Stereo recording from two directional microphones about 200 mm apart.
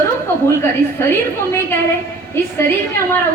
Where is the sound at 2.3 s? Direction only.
10° left (ahead or behind).